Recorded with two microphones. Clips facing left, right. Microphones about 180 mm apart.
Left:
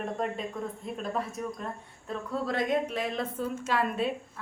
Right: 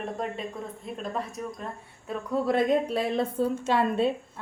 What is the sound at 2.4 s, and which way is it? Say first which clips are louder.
A woman's voice: right 5 dB; 30° right (ahead or behind).